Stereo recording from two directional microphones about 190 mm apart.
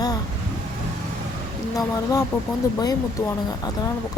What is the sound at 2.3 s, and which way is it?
Speech, 10° left (ahead or behind).